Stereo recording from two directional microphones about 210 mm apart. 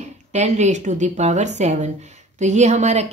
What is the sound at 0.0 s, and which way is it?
A woman's voice, 35° right (ahead or behind).